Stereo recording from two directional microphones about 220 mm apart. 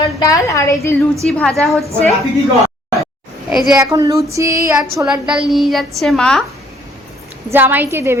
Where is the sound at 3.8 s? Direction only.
15° right (ahead or behind).